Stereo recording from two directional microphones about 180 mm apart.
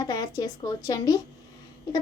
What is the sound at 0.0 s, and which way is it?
Speech, 20° left (ahead or behind).